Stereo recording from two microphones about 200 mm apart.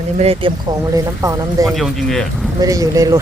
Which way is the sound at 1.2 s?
15° right (ahead or behind).